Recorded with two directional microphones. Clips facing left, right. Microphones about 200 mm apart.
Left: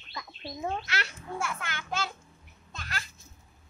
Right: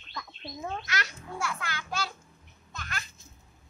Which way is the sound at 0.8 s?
25° left (ahead or behind).